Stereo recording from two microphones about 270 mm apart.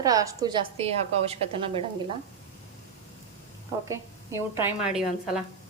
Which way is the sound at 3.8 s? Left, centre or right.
Centre.